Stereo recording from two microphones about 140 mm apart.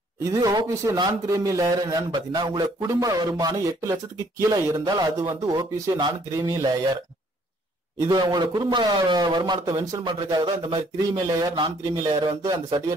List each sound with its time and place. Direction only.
0.2 s a man's voice: 25° right (ahead or behind)
8.0 s a man's voice: 25° right (ahead or behind)